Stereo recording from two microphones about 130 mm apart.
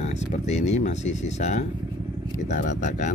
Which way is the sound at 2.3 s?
75° left (ahead or behind).